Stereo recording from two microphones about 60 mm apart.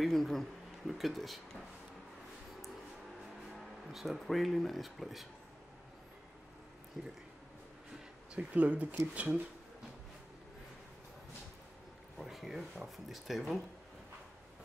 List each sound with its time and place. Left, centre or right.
0.0 s speech: centre
3.9 s speech: centre
7.0 s speech: centre
8.4 s speech: right
12.2 s speech: centre